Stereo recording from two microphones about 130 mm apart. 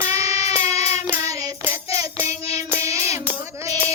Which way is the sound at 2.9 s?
25° right (ahead or behind).